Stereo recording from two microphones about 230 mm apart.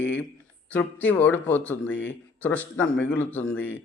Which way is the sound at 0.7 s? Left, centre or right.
Centre.